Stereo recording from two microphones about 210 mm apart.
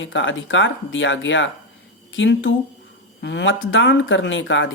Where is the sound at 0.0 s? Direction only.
65° left (ahead or behind).